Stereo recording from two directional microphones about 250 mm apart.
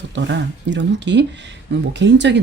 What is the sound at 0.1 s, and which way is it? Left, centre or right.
Speech, right.